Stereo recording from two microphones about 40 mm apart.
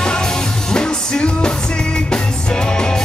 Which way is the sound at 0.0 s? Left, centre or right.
Left.